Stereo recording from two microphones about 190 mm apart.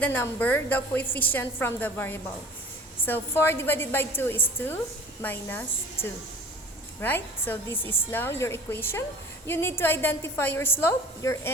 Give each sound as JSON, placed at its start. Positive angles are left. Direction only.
{"t": 0.0, "sound": "a woman's voice", "side_deg": 10}